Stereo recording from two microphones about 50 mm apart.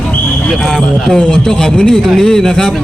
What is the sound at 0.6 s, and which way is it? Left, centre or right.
Speech, centre.